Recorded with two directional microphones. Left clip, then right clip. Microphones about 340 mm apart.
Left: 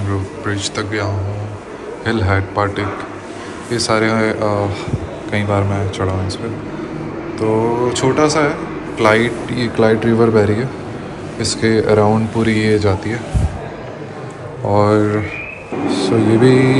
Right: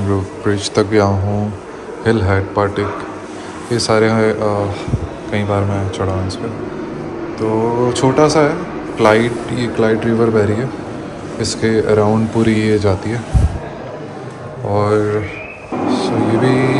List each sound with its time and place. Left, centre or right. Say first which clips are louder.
0.5 s a man's voice: right 6 dB; centre
7.3 s a man's voice: even; centre
14.7 s speech: left 2 dB; centre
15.9 s vehicle: left 2 dB; centre